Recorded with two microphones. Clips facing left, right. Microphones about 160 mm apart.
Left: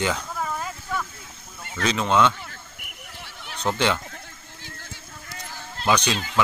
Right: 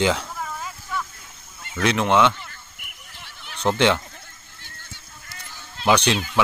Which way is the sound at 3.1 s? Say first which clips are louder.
Left 2 dB; 65° left (ahead or behind).